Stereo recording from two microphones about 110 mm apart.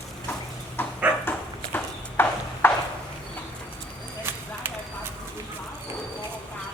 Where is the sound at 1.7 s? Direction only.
20° left (ahead or behind).